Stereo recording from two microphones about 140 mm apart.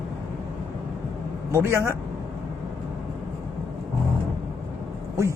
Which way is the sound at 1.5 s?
20° right (ahead or behind).